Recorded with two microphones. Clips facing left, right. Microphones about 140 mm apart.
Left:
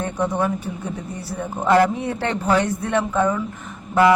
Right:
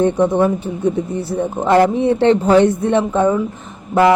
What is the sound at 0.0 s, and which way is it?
Speech, 20° right (ahead or behind).